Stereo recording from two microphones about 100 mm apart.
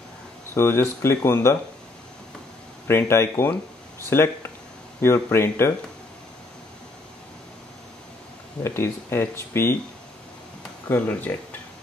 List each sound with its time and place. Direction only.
0.6 s speech: 25° left (ahead or behind)
2.9 s speech: 25° left (ahead or behind)
8.6 s speech: 25° left (ahead or behind)
10.9 s speech: 15° left (ahead or behind)